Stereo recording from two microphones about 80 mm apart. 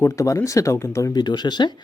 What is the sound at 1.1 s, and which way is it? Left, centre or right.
Speech, left.